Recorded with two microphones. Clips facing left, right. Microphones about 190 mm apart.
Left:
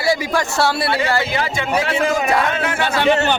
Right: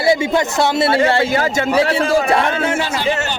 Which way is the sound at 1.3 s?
45° right (ahead or behind).